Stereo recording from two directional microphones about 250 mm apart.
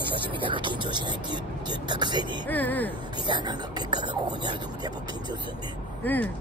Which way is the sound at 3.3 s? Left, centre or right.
Centre.